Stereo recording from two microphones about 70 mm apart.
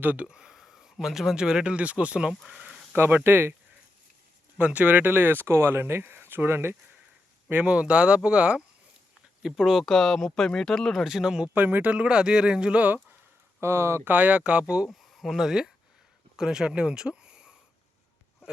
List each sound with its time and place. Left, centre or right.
0.0 s speech: right
0.3 s speech: centre
2.3 s speech: centre
2.6 s a sound: centre
2.9 s speech: right
4.5 s speech: centre; by 6.7 s right
7.5 s speech: centre
9.8 s speech: centre
11.0 s speech: centre
11.5 s speech: right
13.6 s speech: right
14.0 s speech: right
15.1 s speech: centre